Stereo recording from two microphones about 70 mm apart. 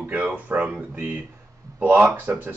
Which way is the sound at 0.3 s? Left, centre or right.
Right.